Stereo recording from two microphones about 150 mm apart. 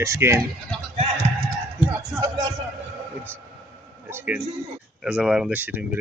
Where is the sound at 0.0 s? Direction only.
15° right (ahead or behind).